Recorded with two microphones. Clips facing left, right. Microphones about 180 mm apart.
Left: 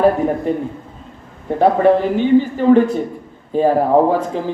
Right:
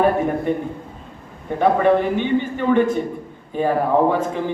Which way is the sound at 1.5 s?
35° left (ahead or behind).